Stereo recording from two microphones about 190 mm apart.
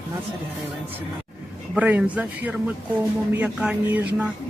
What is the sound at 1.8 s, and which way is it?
A man's voice, 10° right (ahead or behind).